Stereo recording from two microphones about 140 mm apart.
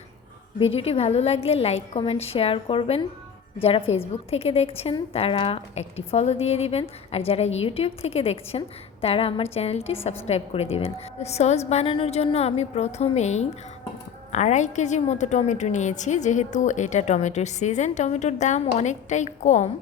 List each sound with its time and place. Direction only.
0.6 s a woman's voice: 45° left (ahead or behind)